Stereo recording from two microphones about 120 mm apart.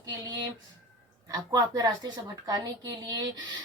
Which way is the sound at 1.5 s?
30° right (ahead or behind).